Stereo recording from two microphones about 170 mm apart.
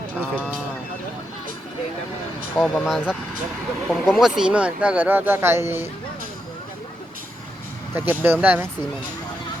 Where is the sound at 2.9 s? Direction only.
5° right (ahead or behind).